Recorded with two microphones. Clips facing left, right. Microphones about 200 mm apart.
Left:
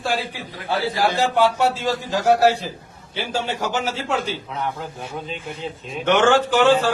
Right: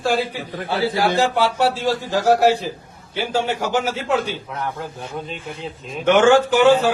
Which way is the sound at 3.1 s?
10° right (ahead or behind).